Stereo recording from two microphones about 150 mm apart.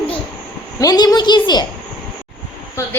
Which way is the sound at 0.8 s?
25° left (ahead or behind).